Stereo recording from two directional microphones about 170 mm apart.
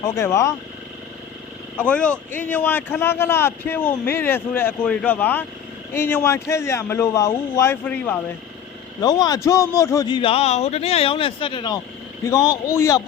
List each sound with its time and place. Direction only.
0.0 s speech: 15° left (ahead or behind)
1.8 s speech: 5° left (ahead or behind)
9.0 s a man's voice: 25° left (ahead or behind)